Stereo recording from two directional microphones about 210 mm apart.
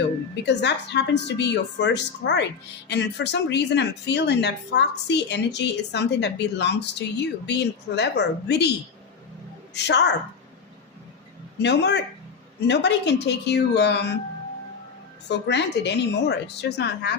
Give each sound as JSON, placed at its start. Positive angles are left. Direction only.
{"t": 0.4, "sound": "speech", "side_deg": 55}
{"t": 9.7, "sound": "speech", "side_deg": 55}
{"t": 11.6, "sound": "speech", "side_deg": 55}
{"t": 15.3, "sound": "a woman's voice", "side_deg": 55}